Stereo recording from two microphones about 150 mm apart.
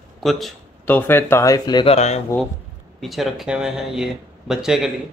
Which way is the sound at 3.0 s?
Centre (ahead or behind).